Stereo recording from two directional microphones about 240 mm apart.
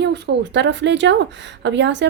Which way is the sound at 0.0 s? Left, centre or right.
Right.